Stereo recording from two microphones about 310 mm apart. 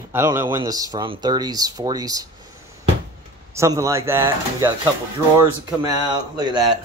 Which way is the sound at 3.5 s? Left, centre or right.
Centre.